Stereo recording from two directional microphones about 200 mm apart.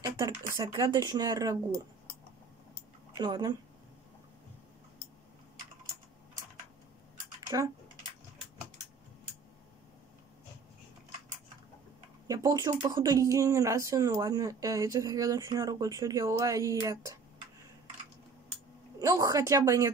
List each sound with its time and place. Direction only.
0.0 s speech: 15° right (ahead or behind)
3.2 s speech: 20° right (ahead or behind)
7.4 s speech: 20° right (ahead or behind)
12.3 s speech: 15° right (ahead or behind)
18.9 s speech: 15° right (ahead or behind)